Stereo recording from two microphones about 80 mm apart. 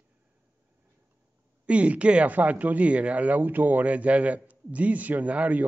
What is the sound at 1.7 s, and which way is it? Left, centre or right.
Speech, centre.